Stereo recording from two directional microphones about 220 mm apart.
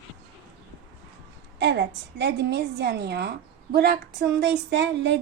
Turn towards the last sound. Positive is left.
turn(degrees=-50)  # may be behind; listen again after turning